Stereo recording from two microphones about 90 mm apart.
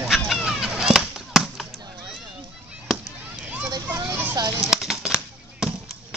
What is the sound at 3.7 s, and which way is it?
Children playing, 45° right (ahead or behind).